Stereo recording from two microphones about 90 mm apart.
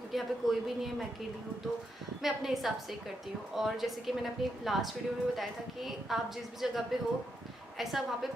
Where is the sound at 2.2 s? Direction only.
Centre (ahead or behind).